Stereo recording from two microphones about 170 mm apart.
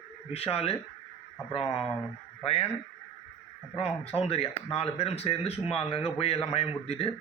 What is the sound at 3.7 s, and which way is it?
Speech, 35° left (ahead or behind).